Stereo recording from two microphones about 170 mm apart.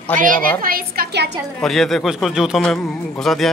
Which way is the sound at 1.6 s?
Centre (ahead or behind).